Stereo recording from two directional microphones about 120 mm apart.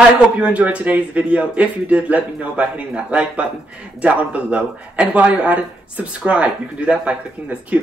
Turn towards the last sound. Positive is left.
turn(degrees=-10)  # may be behind; listen again after turning